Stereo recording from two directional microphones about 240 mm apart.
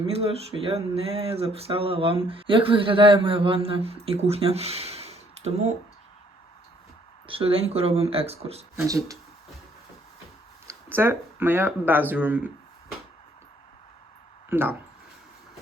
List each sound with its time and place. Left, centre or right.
0.0 s speech: right
7.3 s speech: right
8.9 s speech: centre
10.7 s speech: centre
14.5 s speech: centre